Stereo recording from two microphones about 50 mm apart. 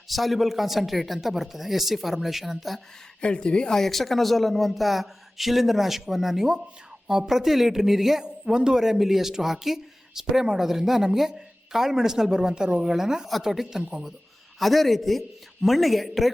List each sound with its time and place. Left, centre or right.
0.1 s speech: centre
3.2 s a woman's voice: left
3.8 s speech: centre
14.6 s speech: centre